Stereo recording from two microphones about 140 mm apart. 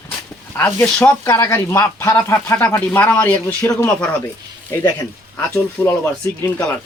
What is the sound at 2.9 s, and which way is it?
Speech, 10° left (ahead or behind).